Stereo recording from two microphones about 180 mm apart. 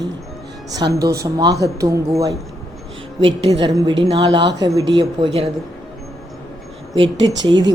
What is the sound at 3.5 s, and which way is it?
Speech, 25° right (ahead or behind).